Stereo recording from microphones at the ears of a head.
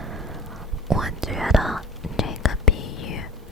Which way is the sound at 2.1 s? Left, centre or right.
Left.